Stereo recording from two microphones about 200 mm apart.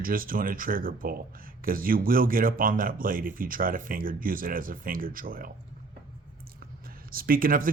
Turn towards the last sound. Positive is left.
turn(degrees=-45)  # may be behind; listen again after turning